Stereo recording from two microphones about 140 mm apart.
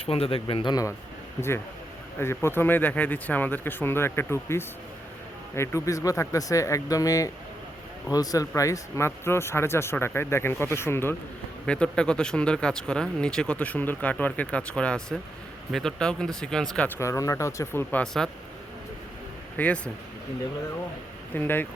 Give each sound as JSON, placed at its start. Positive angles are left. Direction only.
{"t": 0.0, "sound": "a man's voice", "side_deg": 45}
{"t": 17.0, "sound": "speech", "side_deg": 20}
{"t": 18.0, "sound": "speech", "side_deg": 5}
{"t": 19.5, "sound": "speech", "side_deg": 10}
{"t": 21.3, "sound": "speech", "side_deg": 15}